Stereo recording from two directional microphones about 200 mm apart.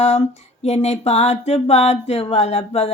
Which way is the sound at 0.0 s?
35° left (ahead or behind).